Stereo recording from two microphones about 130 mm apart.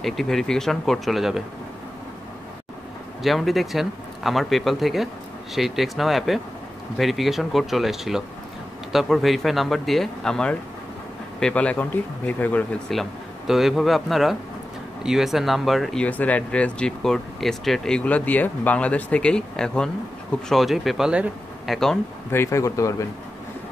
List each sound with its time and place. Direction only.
0.0 s speech: centre (ahead or behind)
3.2 s speech: centre (ahead or behind)
12.9 s speech: centre (ahead or behind)
22.3 s speech: 20° left (ahead or behind)